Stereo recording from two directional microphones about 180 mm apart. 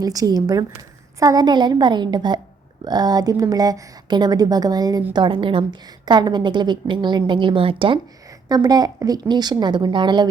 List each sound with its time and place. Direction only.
0.0 s speech: 20° right (ahead or behind)